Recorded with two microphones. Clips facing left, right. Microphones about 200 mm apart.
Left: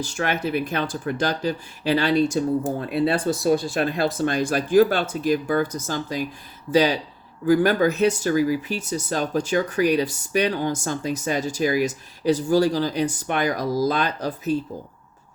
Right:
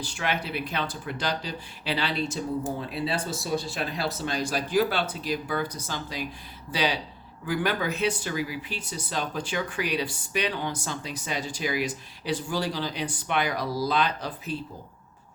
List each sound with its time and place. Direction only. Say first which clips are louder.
0.0 s speech: left 6 dB; 45° left (ahead or behind)